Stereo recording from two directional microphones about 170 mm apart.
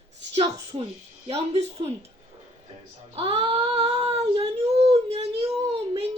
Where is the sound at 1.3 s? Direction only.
40° right (ahead or behind).